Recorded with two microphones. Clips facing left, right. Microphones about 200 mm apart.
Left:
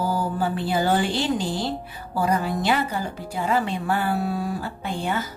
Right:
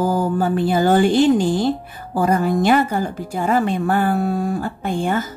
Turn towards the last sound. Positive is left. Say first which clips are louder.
# right 6 dB
turn(degrees=-50)  # may be behind; listen again after turning